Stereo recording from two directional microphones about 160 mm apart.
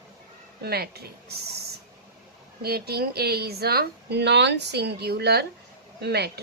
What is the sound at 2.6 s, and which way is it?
A woman's voice, 80° right.